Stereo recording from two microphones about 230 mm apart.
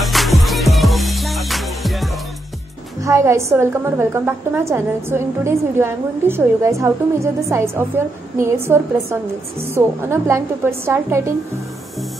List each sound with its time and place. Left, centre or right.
0.0 s music: centre
3.0 s a woman's voice: centre